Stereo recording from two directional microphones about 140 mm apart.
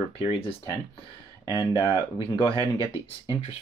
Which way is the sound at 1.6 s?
25° left (ahead or behind).